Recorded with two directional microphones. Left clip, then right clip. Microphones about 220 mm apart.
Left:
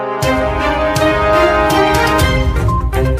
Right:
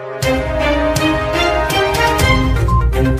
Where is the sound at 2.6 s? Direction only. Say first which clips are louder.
Left 1 dB; centre (ahead or behind).